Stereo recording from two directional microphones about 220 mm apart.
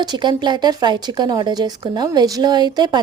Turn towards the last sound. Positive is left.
turn(degrees=-20)  # may be behind; listen again after turning